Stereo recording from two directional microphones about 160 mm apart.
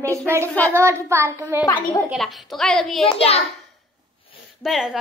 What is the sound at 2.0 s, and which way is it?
A child's voice, centre (ahead or behind).